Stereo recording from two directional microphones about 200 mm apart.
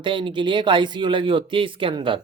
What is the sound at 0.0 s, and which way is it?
Speech, 25° right (ahead or behind).